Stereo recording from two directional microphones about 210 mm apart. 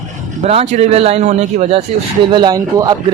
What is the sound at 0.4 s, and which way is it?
Speech, 30° right (ahead or behind).